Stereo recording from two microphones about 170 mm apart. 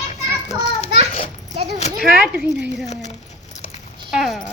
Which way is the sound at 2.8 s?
40° left (ahead or behind).